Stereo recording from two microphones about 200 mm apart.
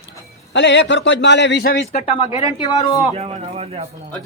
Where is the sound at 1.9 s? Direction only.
30° left (ahead or behind).